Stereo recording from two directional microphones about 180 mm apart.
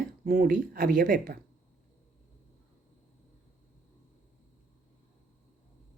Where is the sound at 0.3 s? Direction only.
45° right (ahead or behind).